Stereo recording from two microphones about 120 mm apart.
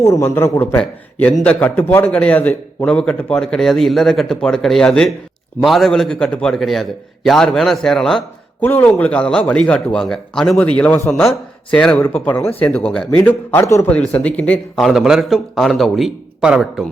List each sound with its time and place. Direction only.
0.0 s a man's voice: 20° left (ahead or behind)
11.1 s a man's voice: 5° left (ahead or behind); by 13.9 s 20° left (ahead or behind)
13.9 s a man's voice: 10° left (ahead or behind)
14.8 s speech: 5° right (ahead or behind)